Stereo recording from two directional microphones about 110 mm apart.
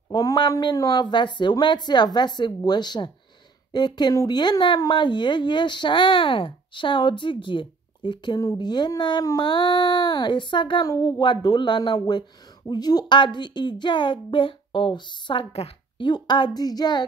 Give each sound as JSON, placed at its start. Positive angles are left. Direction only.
{"t": 0.1, "sound": "speech", "side_deg": 40}
{"t": 10.9, "sound": "speech", "side_deg": 35}